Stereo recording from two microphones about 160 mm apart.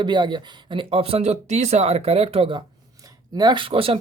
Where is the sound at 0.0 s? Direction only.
30° right (ahead or behind).